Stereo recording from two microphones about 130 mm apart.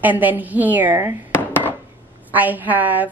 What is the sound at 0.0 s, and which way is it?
A woman's voice, 15° right (ahead or behind).